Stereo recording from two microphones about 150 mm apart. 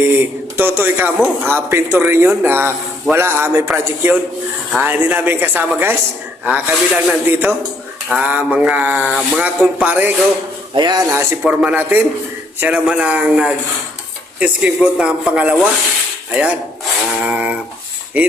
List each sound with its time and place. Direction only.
0.0 s a man's voice: 15° right (ahead or behind)
10.8 s speech: 30° right (ahead or behind)
11.1 s a man's voice: 15° right (ahead or behind)